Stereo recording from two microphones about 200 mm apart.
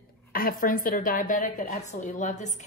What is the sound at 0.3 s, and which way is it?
A woman's voice, 45° left (ahead or behind).